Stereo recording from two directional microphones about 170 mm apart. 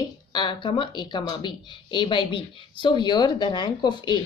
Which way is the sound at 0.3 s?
25° left (ahead or behind).